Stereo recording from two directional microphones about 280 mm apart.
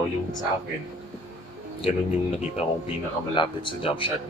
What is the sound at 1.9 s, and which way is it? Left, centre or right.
Speech, left.